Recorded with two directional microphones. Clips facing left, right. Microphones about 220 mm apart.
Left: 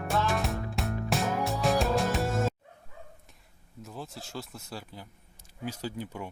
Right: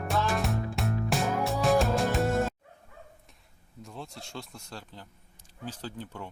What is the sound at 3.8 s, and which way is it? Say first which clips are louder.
Speech: left 1 dB; centre (ahead or behind).